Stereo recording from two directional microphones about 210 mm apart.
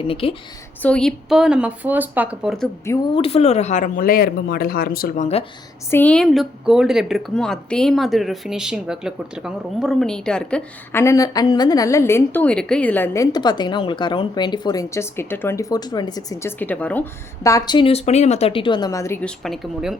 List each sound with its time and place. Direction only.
0.1 s a woman's voice: 25° left (ahead or behind)
0.8 s a woman's voice: 5° left (ahead or behind)
3.2 s speech: 30° left (ahead or behind)
5.9 s speech: 5° left (ahead or behind)